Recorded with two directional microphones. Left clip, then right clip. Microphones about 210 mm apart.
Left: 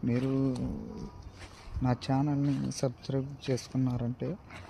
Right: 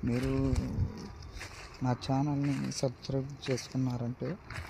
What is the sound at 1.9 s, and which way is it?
Speech, 20° left (ahead or behind).